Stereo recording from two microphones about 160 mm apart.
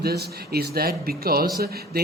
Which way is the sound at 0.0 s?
85° right.